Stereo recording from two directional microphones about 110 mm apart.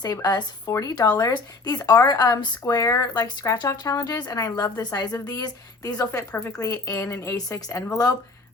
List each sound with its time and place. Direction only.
0.0 s a woman's voice: 35° left (ahead or behind)